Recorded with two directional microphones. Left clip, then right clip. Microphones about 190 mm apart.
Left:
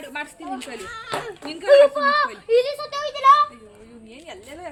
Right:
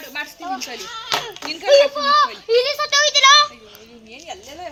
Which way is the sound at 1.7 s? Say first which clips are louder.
Right 1 dB; 60° right (ahead or behind).